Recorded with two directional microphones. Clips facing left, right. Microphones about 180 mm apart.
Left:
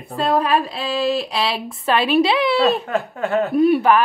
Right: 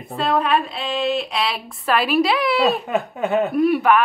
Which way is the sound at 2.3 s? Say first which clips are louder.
Left 2 dB; centre (ahead or behind).